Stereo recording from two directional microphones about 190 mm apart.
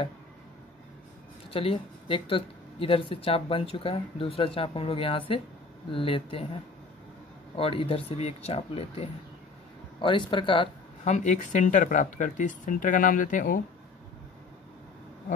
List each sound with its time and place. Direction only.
1.5 s speech: 30° left (ahead or behind)
7.5 s speech: 30° left (ahead or behind)
11.1 s speech: 40° left (ahead or behind)